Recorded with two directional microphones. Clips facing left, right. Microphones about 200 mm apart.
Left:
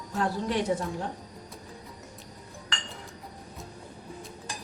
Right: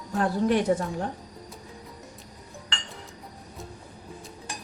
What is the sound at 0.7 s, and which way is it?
Speech, 55° right (ahead or behind).